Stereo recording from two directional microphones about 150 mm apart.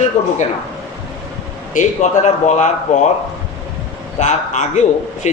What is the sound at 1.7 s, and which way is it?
A man's voice, 55° left (ahead or behind).